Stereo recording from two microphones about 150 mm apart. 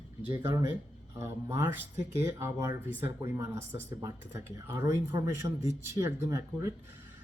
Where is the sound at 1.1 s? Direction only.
20° right (ahead or behind).